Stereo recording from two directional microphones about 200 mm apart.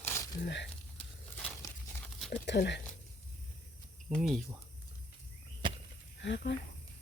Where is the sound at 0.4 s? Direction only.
60° left (ahead or behind).